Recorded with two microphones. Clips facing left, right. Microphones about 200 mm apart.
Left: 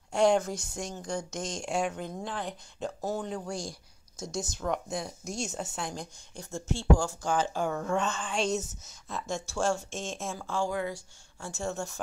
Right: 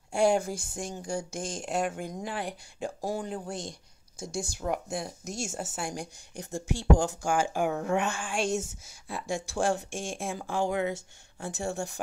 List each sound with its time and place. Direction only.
0.1 s speech: 10° right (ahead or behind)